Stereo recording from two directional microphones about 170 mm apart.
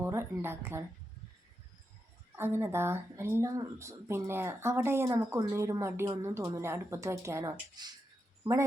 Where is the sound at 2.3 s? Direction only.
15° right (ahead or behind).